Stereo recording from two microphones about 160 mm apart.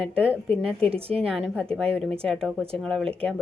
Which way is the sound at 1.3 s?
Centre (ahead or behind).